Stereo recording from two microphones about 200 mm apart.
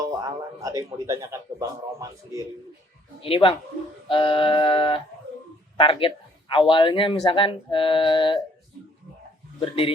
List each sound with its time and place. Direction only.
0.0 s speech: 20° right (ahead or behind)
3.2 s speech: 30° left (ahead or behind)
9.6 s speech: 25° left (ahead or behind)